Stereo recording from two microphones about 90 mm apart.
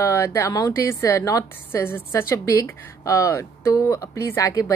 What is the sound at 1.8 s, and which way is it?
Speech, 25° left (ahead or behind).